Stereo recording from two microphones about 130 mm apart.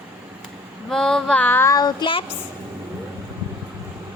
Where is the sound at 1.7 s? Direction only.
35° left (ahead or behind).